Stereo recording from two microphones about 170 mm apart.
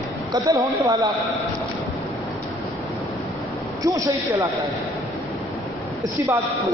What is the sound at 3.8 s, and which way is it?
Speech, 20° right (ahead or behind).